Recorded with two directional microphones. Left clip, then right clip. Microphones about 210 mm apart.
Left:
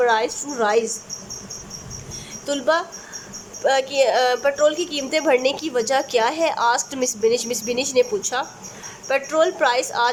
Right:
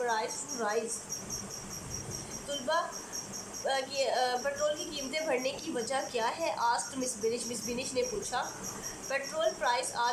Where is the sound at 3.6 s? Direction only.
50° left (ahead or behind).